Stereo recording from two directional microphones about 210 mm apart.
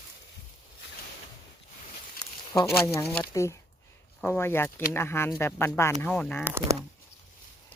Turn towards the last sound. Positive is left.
turn(degrees=-10)  # may be behind; listen again after turning